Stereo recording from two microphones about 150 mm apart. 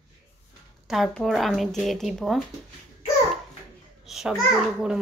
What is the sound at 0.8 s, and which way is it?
Speech, centre (ahead or behind).